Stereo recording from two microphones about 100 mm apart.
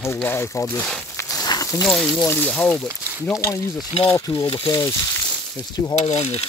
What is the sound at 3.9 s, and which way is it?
Speech, 75° left (ahead or behind).